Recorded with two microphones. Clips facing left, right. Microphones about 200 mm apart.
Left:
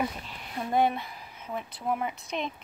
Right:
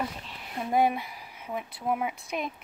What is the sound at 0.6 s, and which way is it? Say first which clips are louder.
A woman's voice: right 1 dB; 10° right (ahead or behind).